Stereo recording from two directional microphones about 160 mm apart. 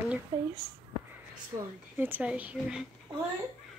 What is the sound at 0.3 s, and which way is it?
Speech, 20° right (ahead or behind).